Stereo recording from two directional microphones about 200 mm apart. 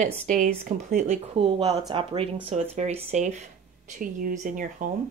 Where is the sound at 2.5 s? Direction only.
35° right (ahead or behind).